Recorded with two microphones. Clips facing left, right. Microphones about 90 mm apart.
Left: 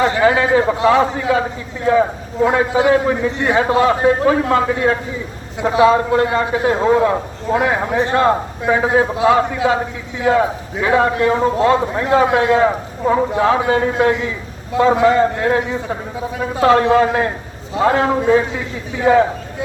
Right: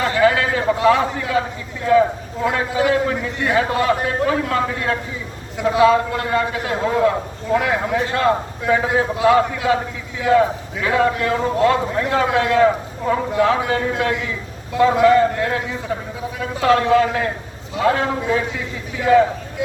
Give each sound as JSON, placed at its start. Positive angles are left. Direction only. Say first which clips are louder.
{"t": 0.0, "sound": "a man's voice", "louder": "left 2 dB", "side_deg": 25}
{"t": 2.4, "sound": "a man's voice", "louder": "left 5 dB", "side_deg": 20}